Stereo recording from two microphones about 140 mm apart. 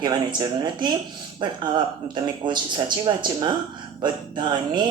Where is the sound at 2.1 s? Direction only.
35° right (ahead or behind).